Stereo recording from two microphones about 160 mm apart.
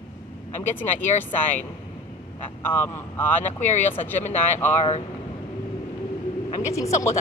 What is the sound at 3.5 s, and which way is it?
Speech, 50° left (ahead or behind).